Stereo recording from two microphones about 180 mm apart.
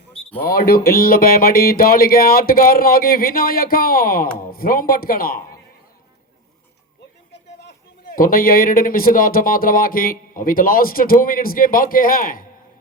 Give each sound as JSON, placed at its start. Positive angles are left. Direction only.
{"t": 0.4, "sound": "speech", "side_deg": 55}
{"t": 8.1, "sound": "speech", "side_deg": 50}